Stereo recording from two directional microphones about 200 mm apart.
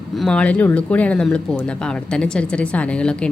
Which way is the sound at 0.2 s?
5° left (ahead or behind).